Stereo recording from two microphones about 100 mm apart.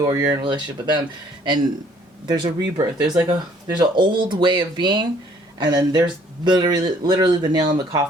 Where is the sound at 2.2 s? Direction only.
45° right (ahead or behind).